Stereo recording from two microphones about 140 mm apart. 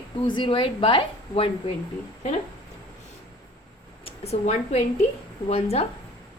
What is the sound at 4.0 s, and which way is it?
A woman's voice, 45° left (ahead or behind).